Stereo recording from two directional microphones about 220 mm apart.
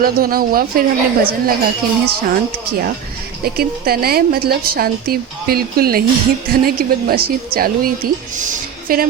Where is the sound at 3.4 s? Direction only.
45° right (ahead or behind).